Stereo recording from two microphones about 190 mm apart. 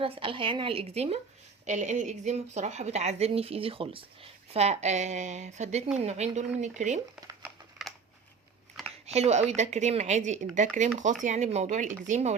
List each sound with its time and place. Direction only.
0.0 s a woman's voice: 30° right (ahead or behind)
7.4 s a sound: centre (ahead or behind)
9.1 s a woman's voice: 35° right (ahead or behind)